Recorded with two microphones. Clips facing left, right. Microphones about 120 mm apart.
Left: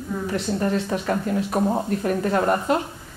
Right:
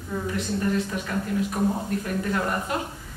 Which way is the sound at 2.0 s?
40° left (ahead or behind).